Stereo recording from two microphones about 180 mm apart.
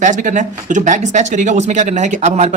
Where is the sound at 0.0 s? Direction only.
45° right (ahead or behind).